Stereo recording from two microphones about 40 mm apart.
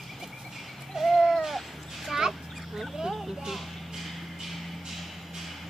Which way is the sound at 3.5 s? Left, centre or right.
Centre.